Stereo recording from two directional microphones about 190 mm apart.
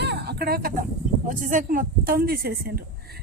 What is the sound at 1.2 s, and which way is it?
Speech, 45° right (ahead or behind).